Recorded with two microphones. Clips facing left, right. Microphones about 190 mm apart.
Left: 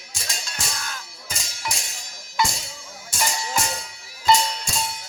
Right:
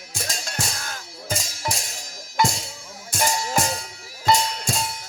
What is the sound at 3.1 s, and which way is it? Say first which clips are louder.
Music: right 3 dB; 50° right (ahead or behind).